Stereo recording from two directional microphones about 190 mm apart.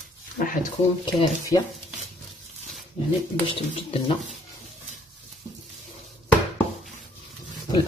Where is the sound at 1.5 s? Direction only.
15° left (ahead or behind).